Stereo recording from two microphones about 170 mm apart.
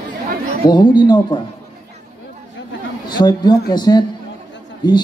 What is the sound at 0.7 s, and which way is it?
Speech, 25° left (ahead or behind).